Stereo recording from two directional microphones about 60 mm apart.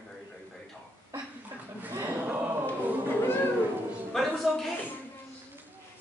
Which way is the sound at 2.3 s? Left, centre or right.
Right.